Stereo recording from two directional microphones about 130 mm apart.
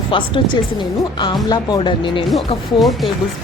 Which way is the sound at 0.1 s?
40° left (ahead or behind).